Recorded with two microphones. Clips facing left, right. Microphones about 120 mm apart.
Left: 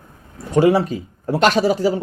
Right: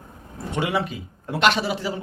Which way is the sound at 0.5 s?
40° left (ahead or behind).